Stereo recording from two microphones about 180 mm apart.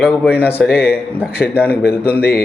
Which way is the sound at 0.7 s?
60° left (ahead or behind).